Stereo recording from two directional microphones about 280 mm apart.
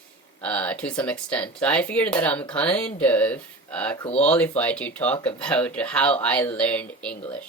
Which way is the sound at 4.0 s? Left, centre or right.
Left.